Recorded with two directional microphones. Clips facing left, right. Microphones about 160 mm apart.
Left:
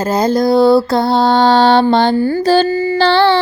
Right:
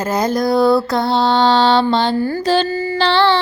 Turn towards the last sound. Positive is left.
turn(degrees=40)  # may be behind; listen again after turning